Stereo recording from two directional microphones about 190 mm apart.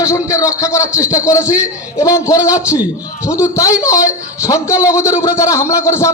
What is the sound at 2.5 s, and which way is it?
Speech, 10° right (ahead or behind).